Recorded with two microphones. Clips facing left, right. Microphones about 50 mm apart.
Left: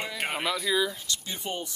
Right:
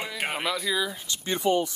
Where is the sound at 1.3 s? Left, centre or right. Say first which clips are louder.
Right 14 dB; right.